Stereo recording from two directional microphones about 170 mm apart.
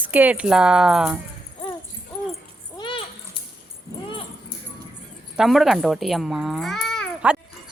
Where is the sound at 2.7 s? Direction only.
30° left (ahead or behind).